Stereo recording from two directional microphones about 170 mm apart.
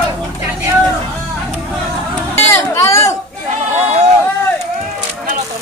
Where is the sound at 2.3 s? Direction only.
15° left (ahead or behind).